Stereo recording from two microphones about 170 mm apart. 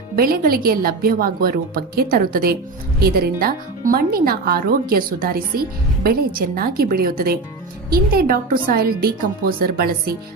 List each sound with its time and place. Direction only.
0.2 s speech: 60° right (ahead or behind)